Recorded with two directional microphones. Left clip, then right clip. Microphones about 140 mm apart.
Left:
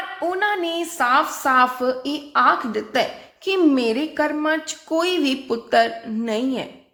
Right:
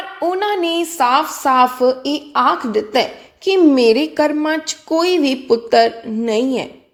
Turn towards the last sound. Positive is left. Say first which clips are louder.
# right 6 dB
turn(degrees=-20)  # may be behind; listen again after turning